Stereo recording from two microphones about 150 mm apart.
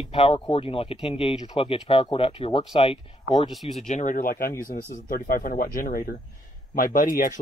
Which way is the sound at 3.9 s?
55° left (ahead or behind).